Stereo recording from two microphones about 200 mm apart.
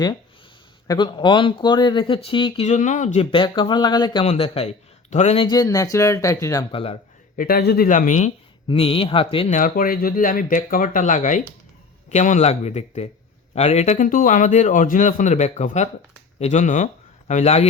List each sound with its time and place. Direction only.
0.9 s speech: 25° left (ahead or behind)
3.3 s speech: 25° left (ahead or behind)
6.7 s speech: 30° left (ahead or behind)
7.3 s speech: 45° left (ahead or behind); by 9.5 s 25° left (ahead or behind)
9.5 s a man's voice: 45° left (ahead or behind)